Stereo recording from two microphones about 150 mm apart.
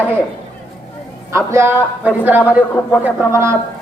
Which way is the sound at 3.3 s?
20° right (ahead or behind).